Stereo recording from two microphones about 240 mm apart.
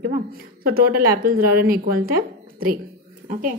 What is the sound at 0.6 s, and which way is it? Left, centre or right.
A woman's voice, right.